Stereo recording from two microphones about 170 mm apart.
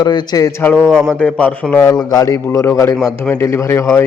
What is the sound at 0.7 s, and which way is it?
A man's voice, 5° left (ahead or behind).